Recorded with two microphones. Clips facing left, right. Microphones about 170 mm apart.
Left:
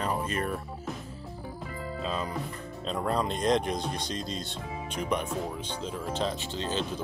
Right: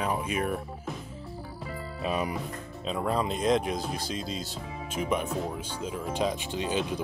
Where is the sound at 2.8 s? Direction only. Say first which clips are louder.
Right 1 dB; 5° right (ahead or behind).